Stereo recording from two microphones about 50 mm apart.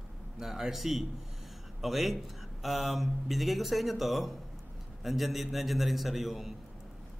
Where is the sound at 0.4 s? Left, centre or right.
Centre.